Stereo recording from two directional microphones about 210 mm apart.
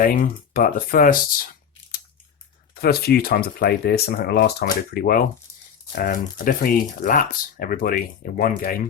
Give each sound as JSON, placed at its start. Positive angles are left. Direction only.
{"t": 0.0, "sound": "speech", "side_deg": 40}
{"t": 2.7, "sound": "speech", "side_deg": 50}